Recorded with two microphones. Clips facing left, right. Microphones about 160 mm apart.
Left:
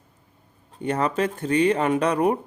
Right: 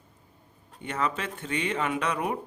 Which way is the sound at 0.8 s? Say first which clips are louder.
Left 7 dB; 40° left (ahead or behind).